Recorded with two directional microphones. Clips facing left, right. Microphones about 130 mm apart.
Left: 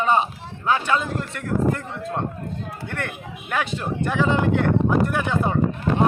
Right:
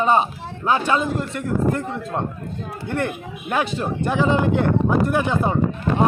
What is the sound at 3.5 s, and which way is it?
Speech, 25° right (ahead or behind).